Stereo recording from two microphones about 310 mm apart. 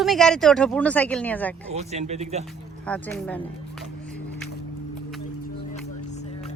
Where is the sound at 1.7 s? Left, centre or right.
Right.